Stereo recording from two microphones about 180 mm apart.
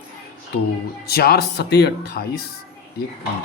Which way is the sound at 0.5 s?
60° left (ahead or behind).